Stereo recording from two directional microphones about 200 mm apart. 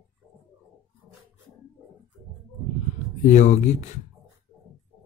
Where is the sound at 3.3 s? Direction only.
35° left (ahead or behind).